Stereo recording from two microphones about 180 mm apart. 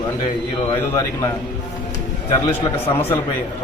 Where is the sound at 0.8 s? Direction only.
15° left (ahead or behind).